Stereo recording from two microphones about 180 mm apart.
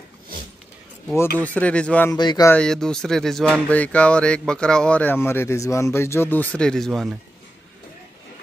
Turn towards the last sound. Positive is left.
turn(degrees=0)  # may be behind; listen again after turning